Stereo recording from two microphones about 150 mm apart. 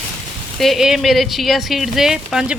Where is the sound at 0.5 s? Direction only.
Centre (ahead or behind).